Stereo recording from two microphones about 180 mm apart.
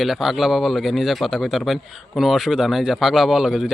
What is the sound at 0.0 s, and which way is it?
Speech, centre (ahead or behind).